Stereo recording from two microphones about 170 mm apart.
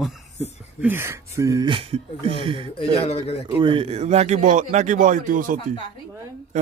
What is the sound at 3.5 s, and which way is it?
Speech, 30° right (ahead or behind).